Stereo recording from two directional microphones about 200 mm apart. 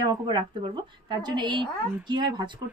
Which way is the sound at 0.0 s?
25° right (ahead or behind).